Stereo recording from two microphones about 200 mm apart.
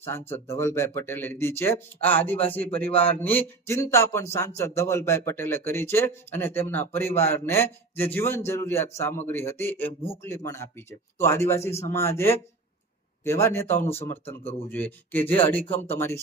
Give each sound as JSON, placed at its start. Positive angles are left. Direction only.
{"t": 0.0, "sound": "a man's voice", "side_deg": 10}
{"t": 14.3, "sound": "speech", "side_deg": 30}
{"t": 14.7, "sound": "a man's voice", "side_deg": 10}